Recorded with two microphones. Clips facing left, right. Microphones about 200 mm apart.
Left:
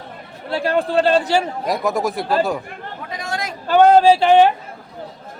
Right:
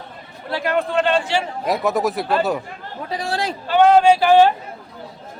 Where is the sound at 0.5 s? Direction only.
30° left (ahead or behind).